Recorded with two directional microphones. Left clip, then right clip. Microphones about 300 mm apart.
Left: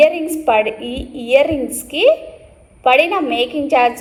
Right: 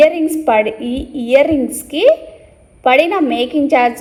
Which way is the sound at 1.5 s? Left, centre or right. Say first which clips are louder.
Right 4 dB; centre.